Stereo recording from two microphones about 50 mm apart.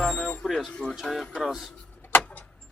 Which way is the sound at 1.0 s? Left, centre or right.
Centre.